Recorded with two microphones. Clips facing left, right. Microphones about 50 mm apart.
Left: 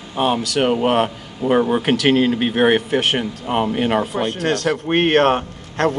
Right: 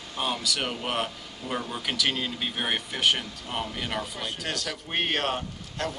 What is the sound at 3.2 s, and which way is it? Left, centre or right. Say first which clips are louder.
Speech: left 12 dB; left.